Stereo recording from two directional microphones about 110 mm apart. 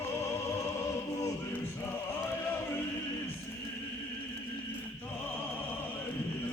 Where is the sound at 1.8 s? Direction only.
20° left (ahead or behind).